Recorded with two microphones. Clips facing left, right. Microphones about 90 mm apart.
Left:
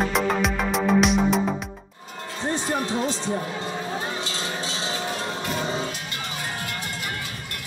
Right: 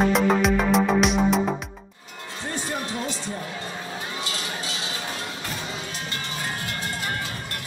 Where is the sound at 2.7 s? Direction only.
30° left (ahead or behind).